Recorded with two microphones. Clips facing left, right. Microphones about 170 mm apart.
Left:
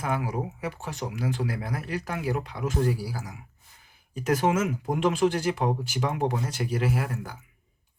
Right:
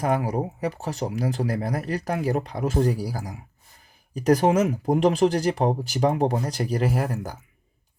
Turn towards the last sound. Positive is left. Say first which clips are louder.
# right 3 dB
turn(degrees=-40)  # may be behind; listen again after turning